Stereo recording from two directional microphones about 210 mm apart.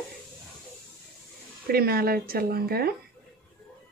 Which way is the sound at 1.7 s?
45° right (ahead or behind).